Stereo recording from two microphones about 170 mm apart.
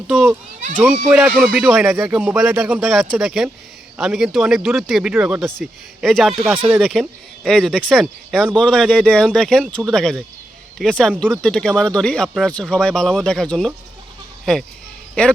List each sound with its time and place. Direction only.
0.1 s a child's voice: 5° right (ahead or behind)